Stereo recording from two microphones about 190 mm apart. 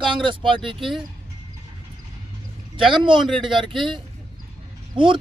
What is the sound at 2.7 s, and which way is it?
Speech, 25° right (ahead or behind).